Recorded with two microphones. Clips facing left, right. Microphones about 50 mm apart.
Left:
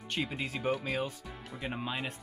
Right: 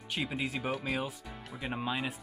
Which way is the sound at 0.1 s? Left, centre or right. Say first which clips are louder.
Right 1 dB; centre.